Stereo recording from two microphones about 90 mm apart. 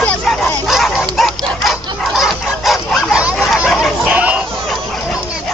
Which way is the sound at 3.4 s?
Centre (ahead or behind).